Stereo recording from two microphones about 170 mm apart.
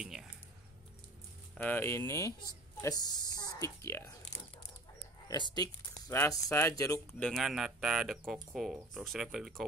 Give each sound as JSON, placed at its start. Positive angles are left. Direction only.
{"t": 0.0, "sound": "a sound", "side_deg": -5}
{"t": 1.6, "sound": "speech", "side_deg": 10}
{"t": 5.3, "sound": "speech", "side_deg": 25}
{"t": 7.2, "sound": "speech", "side_deg": 0}